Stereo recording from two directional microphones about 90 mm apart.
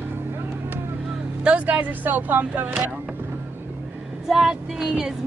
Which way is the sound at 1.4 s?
15° right (ahead or behind).